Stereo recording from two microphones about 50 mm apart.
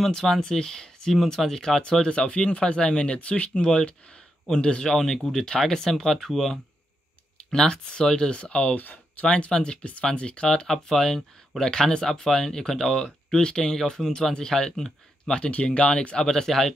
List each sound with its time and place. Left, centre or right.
0.0 s speech: centre
7.5 s speech: centre
13.3 s speech: centre
16.3 s speech: centre